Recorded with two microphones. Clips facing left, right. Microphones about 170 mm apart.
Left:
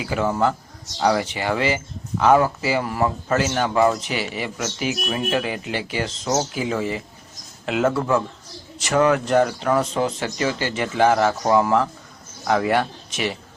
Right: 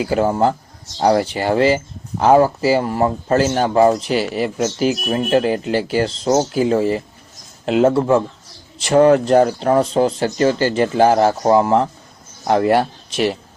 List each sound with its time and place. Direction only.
0.0 s speech: 40° right (ahead or behind)